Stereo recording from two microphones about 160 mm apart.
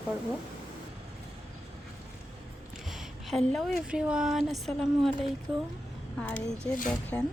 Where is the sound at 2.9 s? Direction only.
Centre (ahead or behind).